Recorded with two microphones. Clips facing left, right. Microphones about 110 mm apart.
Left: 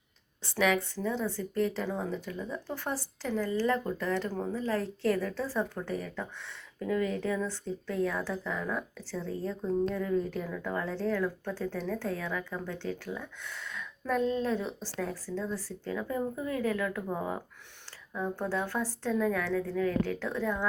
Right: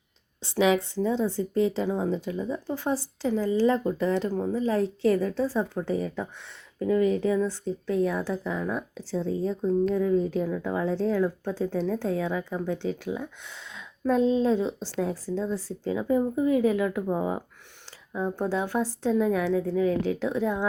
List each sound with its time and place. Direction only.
0.4 s a woman's voice: 20° right (ahead or behind)
6.7 s a woman's voice: 5° right (ahead or behind); by 14.2 s 20° right (ahead or behind)
14.2 s speech: 90° right
14.4 s a woman's voice: 25° right (ahead or behind)